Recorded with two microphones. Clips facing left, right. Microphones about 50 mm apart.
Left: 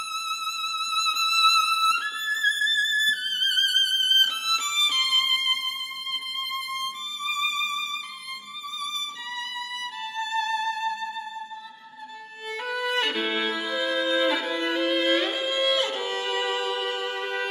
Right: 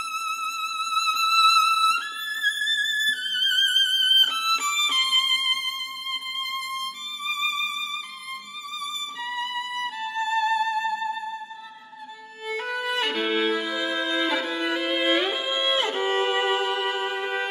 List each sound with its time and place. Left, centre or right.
0.1 s music: right
0.6 s music: centre
3.6 s music: right
5.0 s violin: centre
6.5 s music: centre
9.3 s violin: centre
9.9 s music: centre
12.4 s violin: centre